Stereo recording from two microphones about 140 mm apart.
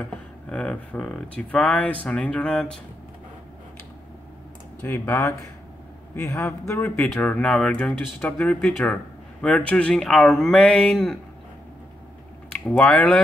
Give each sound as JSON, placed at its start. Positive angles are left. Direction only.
{"t": 0.5, "sound": "speech", "side_deg": 5}
{"t": 4.8, "sound": "a man's voice", "side_deg": 15}
{"t": 7.0, "sound": "speech", "side_deg": 5}
{"t": 12.7, "sound": "speech", "side_deg": 10}